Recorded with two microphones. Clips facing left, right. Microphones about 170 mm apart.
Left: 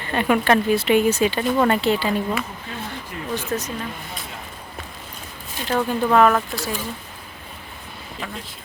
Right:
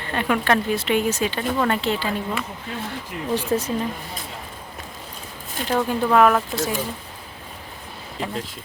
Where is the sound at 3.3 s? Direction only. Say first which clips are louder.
Right 4 dB; 30° right (ahead or behind).